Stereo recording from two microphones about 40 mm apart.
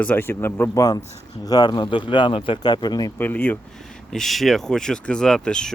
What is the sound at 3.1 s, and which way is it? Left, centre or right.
Speech, left.